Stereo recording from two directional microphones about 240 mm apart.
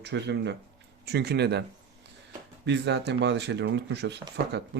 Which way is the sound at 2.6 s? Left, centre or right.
Right.